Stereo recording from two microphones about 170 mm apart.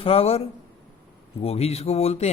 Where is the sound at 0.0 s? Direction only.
35° left (ahead or behind).